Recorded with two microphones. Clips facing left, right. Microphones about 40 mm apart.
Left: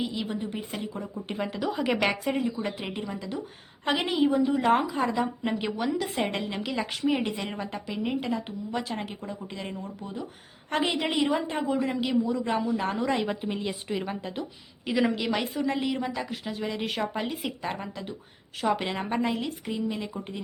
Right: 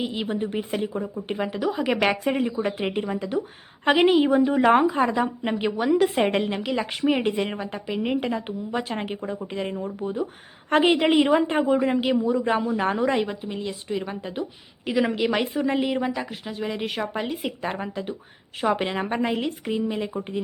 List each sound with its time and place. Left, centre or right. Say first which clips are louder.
0.1 s speech: right 5 dB; right
1.6 s speech: right 3 dB; centre
2.5 s a woman's voice: right 6 dB; right
5.9 s a woman's voice: right 8 dB; right
6.7 s speech: even; centre
13.0 s speech: right 5 dB; centre
13.2 s speech: even; centre; by 16.0 s right
16.1 s speech: right 2 dB; centre
17.6 s speech: right 4 dB; right